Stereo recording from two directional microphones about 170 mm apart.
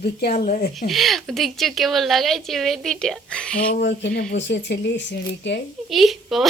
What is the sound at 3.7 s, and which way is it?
Speech, 75° left (ahead or behind).